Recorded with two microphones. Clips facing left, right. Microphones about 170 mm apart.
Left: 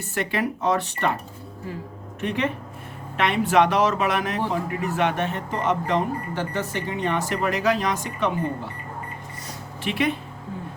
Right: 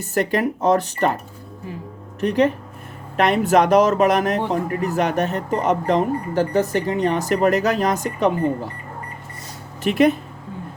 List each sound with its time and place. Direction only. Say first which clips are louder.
0.1 s speech: right 6 dB; 40° right (ahead or behind)
2.2 s speech: right 8 dB; 40° right (ahead or behind)
9.8 s speech: right 8 dB; 45° right (ahead or behind)